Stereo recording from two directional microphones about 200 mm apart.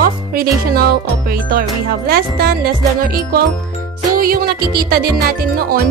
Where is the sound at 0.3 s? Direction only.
50° right (ahead or behind).